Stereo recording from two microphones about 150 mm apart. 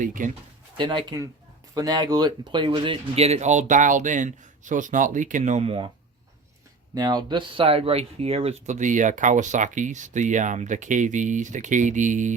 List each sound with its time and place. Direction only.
0.0 s speech: 60° right (ahead or behind)
0.8 s speech: 30° right (ahead or behind)
6.9 s speech: 30° right (ahead or behind); by 12.3 s 55° right (ahead or behind)